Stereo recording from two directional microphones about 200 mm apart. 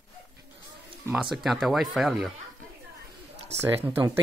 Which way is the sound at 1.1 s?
Centre (ahead or behind).